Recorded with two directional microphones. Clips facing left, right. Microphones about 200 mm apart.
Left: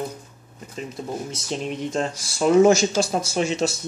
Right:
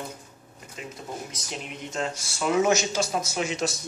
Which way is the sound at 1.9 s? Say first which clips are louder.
Left 5 dB; 35° left (ahead or behind).